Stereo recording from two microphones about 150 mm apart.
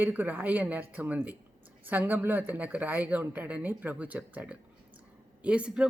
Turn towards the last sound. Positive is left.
turn(degrees=-10)  # may be behind; listen again after turning